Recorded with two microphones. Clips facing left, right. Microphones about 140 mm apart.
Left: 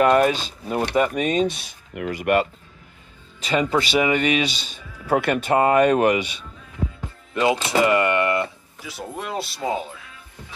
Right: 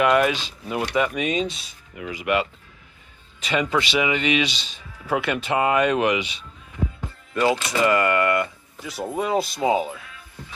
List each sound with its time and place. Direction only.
0.0 s speech: 40° left (ahead or behind)
1.5 s speech: 60° left (ahead or behind)
3.4 s speech: 35° left (ahead or behind)
7.3 s speech: 25° left (ahead or behind)
9.0 s speech: centre (ahead or behind)